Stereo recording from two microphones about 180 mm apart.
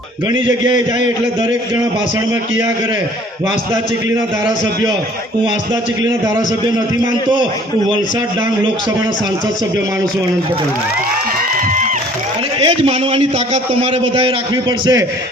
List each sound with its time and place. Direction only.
12.5 s a man's voice: 30° right (ahead or behind)